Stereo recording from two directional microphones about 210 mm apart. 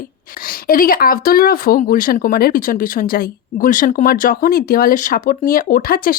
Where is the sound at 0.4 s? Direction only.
40° left (ahead or behind).